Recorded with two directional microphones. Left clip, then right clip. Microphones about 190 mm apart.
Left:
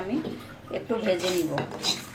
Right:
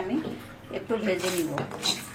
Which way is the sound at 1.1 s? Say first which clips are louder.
Left 4 dB; centre (ahead or behind).